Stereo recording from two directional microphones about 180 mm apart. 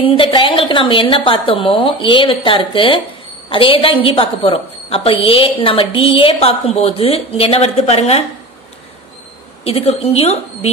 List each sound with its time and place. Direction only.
0.0 s a woman's voice: 25° left (ahead or behind)
9.7 s a woman's voice: 35° left (ahead or behind)